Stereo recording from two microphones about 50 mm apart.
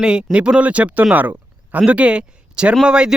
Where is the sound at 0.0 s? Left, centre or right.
Centre.